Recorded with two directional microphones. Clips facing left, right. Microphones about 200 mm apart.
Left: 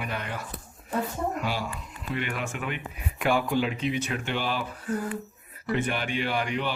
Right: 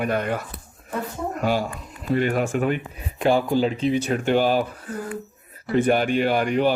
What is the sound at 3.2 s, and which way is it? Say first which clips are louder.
A man's voice: right 6 dB; 30° right (ahead or behind).